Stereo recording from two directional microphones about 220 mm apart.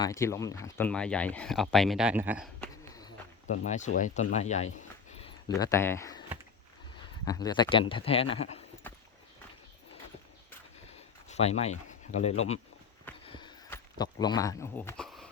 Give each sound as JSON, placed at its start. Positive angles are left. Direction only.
{"t": 0.0, "sound": "speech", "side_deg": 15}
{"t": 3.5, "sound": "speech", "side_deg": 35}
{"t": 5.5, "sound": "speech", "side_deg": 15}
{"t": 7.3, "sound": "a man's voice", "side_deg": 20}
{"t": 8.9, "sound": "clip-clop", "side_deg": 10}
{"t": 10.8, "sound": "a sound", "side_deg": 30}
{"t": 13.7, "sound": "speech", "side_deg": 15}